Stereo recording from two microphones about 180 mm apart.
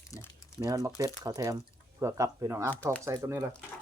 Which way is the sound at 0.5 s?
20° right (ahead or behind).